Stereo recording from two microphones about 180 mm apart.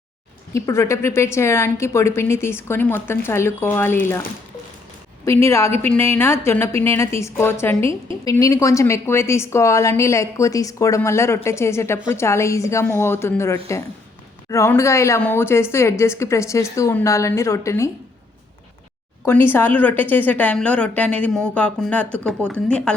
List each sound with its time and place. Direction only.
0.5 s a woman's voice: 15° left (ahead or behind)
5.2 s a woman's voice: 15° left (ahead or behind)
19.2 s a woman's voice: 10° left (ahead or behind)